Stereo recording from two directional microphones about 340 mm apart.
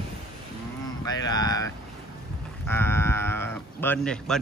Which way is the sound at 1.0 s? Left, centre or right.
Centre.